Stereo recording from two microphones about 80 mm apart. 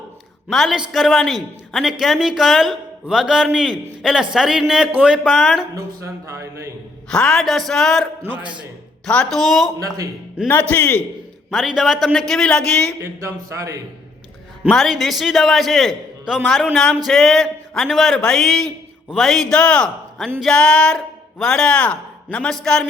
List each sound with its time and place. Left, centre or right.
0.5 s a woman's voice: centre
5.2 s a woman's voice: centre
5.7 s speech: right
7.1 s a woman's voice: centre
8.2 s a man's voice: right
9.3 s a woman's voice: centre
9.7 s speech: right
10.4 s speech: left
11.5 s a woman's voice: centre
12.3 s speech: centre
13.0 s speech: right
14.7 s a woman's voice: centre